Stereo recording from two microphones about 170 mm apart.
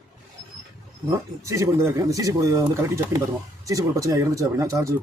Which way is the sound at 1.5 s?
20° right (ahead or behind).